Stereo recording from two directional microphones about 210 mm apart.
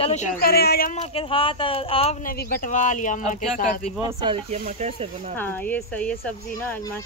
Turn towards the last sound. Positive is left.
turn(degrees=5)  # may be behind; listen again after turning